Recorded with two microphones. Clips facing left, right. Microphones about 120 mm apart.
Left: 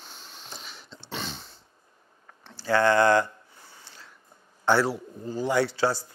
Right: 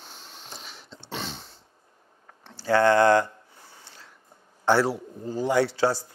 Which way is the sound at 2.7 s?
35° right (ahead or behind).